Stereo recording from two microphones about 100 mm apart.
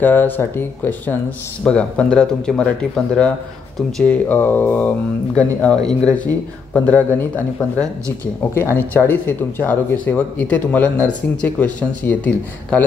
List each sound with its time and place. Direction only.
0.0 s speech: 20° left (ahead or behind)